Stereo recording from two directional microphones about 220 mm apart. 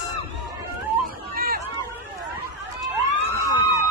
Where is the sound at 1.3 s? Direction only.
40° right (ahead or behind).